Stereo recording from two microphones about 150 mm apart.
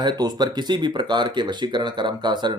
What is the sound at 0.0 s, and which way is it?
Speech, 25° right (ahead or behind).